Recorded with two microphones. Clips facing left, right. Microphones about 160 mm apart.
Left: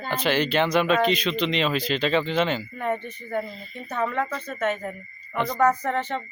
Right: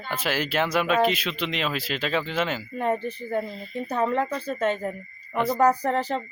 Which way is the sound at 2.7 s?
30° right (ahead or behind).